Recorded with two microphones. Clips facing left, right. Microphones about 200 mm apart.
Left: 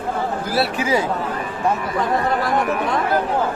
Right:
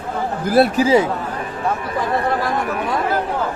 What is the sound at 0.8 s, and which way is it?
Speech, 25° right (ahead or behind).